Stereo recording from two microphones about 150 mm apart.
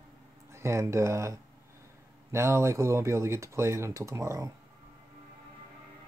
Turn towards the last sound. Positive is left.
turn(degrees=-20)  # may be behind; listen again after turning